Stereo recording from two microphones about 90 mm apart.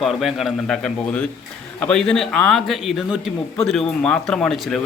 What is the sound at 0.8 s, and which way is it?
A man's voice, 10° left (ahead or behind).